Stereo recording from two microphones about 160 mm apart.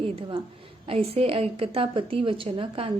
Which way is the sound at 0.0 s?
35° right (ahead or behind).